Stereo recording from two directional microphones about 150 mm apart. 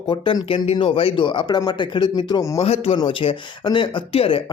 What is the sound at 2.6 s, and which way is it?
Speech, 40° left (ahead or behind).